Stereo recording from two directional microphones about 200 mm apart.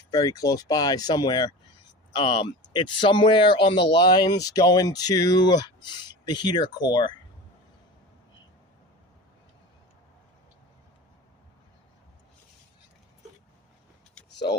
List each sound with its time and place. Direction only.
0.1 s speech: 20° left (ahead or behind)